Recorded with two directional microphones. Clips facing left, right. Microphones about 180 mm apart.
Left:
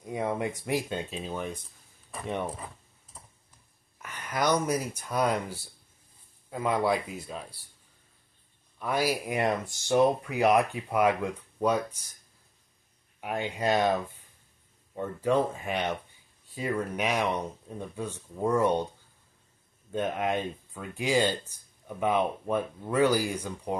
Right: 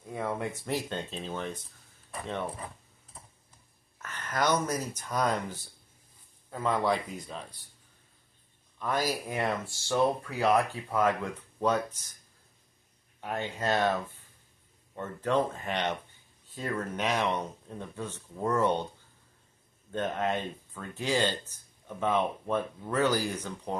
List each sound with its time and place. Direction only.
0.0 s speech: 15° left (ahead or behind)
4.0 s speech: 10° left (ahead or behind)
8.7 s speech: 10° left (ahead or behind)
13.2 s speech: 15° left (ahead or behind)
19.9 s speech: 10° left (ahead or behind)